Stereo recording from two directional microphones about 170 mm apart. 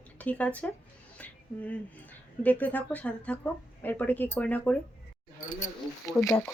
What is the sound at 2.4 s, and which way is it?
Speech, 10° left (ahead or behind).